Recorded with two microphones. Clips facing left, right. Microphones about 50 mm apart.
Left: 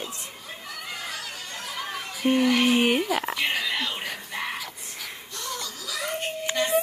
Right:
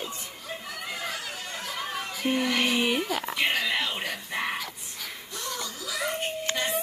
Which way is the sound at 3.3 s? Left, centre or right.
Centre.